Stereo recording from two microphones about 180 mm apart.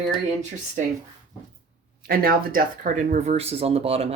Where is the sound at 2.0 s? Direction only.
55° right (ahead or behind); by 4.1 s 35° right (ahead or behind).